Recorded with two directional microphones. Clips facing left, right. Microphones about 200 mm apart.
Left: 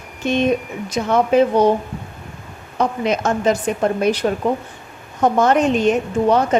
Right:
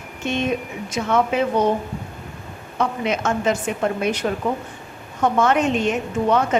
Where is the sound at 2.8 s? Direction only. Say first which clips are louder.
Left 3 dB; 40° left (ahead or behind).